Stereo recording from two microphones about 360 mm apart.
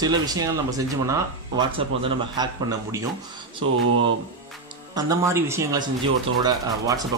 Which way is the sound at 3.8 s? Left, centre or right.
Right.